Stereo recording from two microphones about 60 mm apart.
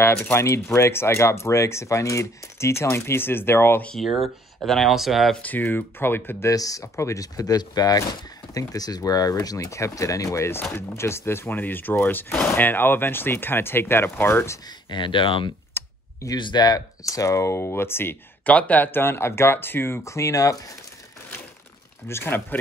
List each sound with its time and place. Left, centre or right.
0.0 s speech: left
3.9 s speech: centre
5.4 s speech: left
6.5 s speech: left
15.8 s clicking: left
16.2 s speech: left
18.4 s speech: left
22.0 s speech: left